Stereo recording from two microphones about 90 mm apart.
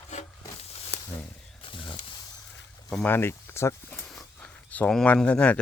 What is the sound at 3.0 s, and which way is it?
Speech, 25° left (ahead or behind).